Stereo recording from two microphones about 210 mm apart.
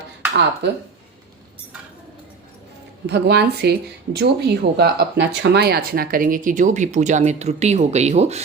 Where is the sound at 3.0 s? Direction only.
50° right (ahead or behind).